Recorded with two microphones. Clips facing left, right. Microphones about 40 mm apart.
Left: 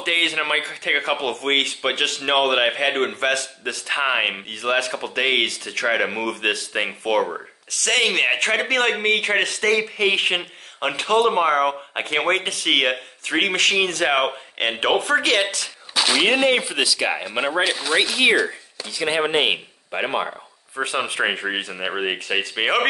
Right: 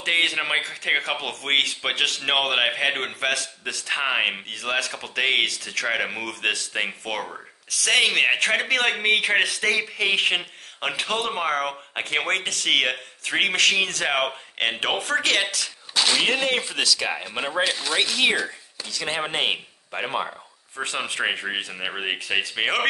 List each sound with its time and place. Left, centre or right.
0.0 s a man's voice: centre